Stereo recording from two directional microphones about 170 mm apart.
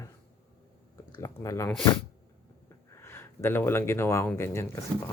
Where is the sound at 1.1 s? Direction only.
20° left (ahead or behind).